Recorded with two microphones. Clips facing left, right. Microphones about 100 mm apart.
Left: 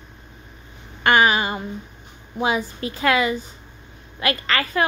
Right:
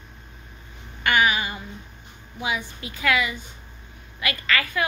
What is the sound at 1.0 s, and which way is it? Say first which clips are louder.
A woman's voice: left 4 dB; 35° left (ahead or behind).